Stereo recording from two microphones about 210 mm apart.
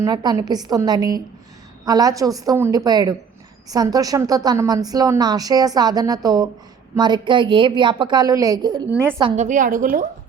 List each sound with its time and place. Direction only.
0.0 s a woman's voice: 20° right (ahead or behind)
9.2 s a woman's voice: 35° right (ahead or behind)